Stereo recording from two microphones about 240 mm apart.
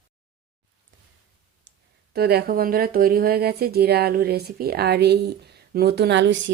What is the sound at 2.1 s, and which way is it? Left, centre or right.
Speech, right.